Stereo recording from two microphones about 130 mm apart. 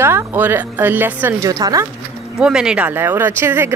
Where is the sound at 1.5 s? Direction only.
30° right (ahead or behind).